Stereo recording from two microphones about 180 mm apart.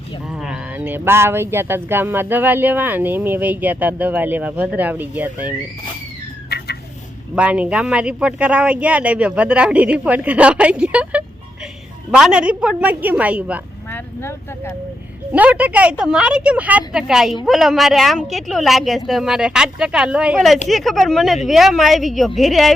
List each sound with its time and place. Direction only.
0.3 s speech: 5° right (ahead or behind)
6.5 s a sound: 65° left (ahead or behind)
7.3 s speech: 5° right (ahead or behind)
13.9 s speech: 15° left (ahead or behind)
15.3 s speech: 10° right (ahead or behind)